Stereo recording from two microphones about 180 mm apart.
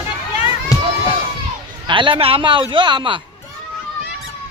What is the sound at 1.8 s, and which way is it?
A man's voice, 25° right (ahead or behind).